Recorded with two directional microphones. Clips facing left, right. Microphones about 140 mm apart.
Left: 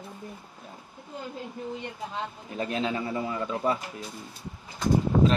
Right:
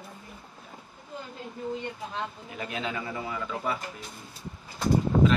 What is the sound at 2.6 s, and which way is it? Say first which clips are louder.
A man's voice: left 5 dB; 30° left (ahead or behind).